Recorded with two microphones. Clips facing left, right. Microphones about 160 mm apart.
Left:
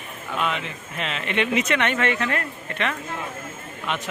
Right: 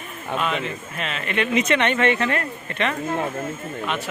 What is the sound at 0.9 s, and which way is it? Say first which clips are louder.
Speech: left 1 dB; 20° left (ahead or behind).